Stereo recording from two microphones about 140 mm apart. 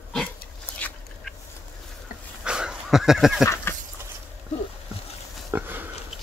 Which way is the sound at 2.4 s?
5° right (ahead or behind).